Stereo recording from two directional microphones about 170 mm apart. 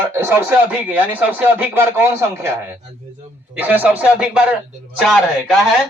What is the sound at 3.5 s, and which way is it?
A man's voice, 10° right (ahead or behind).